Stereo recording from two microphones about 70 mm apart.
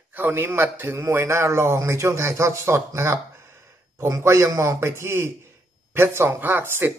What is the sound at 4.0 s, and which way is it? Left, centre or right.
A man's voice, right.